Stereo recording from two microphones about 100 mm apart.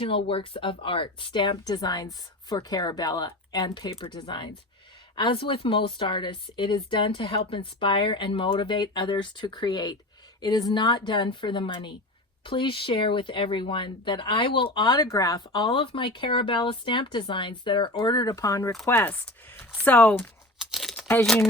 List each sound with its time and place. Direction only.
0.0 s speech: 65° left (ahead or behind); by 3.9 s 40° left (ahead or behind)
3.9 s speech: 55° left (ahead or behind); by 15.4 s 35° left (ahead or behind)
15.4 s speech: 50° left (ahead or behind)
18.9 s speech: 20° left (ahead or behind)
20.6 s crumpling: 5° right (ahead or behind)